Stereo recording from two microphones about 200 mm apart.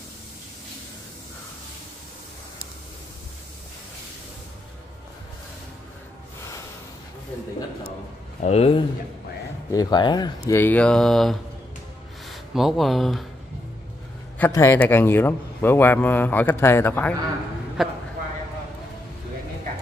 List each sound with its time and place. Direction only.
8.4 s speech: 30° left (ahead or behind)
9.7 s a man's voice: 20° left (ahead or behind); by 11.3 s centre (ahead or behind)
12.5 s speech: centre (ahead or behind)
14.4 s a man's voice: 10° left (ahead or behind)
17.8 s a sound: centre (ahead or behind)